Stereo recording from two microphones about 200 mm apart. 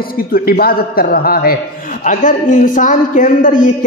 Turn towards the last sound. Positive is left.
turn(degrees=40)  # may be behind; listen again after turning